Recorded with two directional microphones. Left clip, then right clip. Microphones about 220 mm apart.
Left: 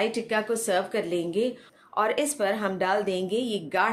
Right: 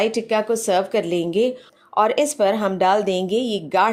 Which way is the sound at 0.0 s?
30° right (ahead or behind).